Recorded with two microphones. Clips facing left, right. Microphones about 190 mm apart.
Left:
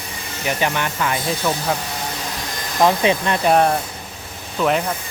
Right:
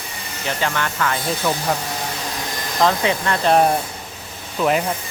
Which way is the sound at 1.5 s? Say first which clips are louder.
Even; 5° left (ahead or behind).